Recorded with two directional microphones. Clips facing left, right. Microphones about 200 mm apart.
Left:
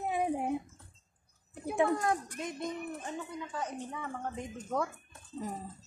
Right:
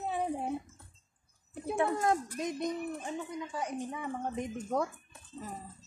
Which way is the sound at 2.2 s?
15° right (ahead or behind).